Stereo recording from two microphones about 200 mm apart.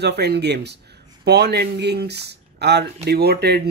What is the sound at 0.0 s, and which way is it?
Speech, 55° right (ahead or behind).